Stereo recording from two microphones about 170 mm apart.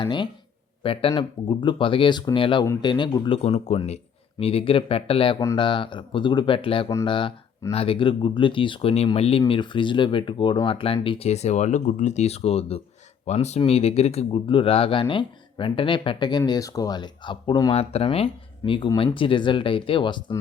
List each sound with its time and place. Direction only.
0.0 s speech: 25° left (ahead or behind)